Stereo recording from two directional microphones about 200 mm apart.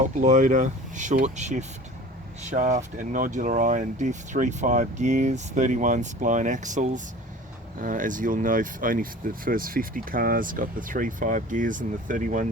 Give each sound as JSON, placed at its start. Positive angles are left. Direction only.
{"t": 0.2, "sound": "speech", "side_deg": -40}